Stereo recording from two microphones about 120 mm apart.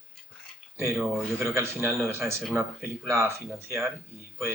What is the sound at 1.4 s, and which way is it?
Speech, 20° right (ahead or behind).